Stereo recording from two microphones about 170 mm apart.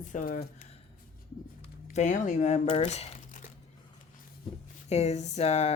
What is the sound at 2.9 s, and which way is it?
Crumpling, 40° left (ahead or behind).